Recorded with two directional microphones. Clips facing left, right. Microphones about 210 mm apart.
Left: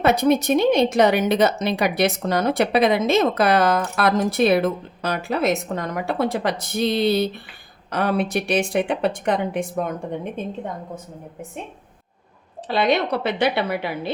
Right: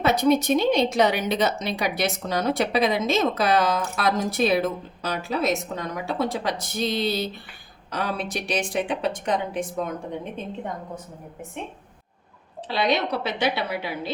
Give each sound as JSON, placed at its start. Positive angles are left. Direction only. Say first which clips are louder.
{"t": 0.0, "sound": "a woman's voice", "louder": "left 2 dB", "side_deg": 55}
{"t": 12.6, "sound": "a woman's voice", "louder": "left 4 dB", "side_deg": 50}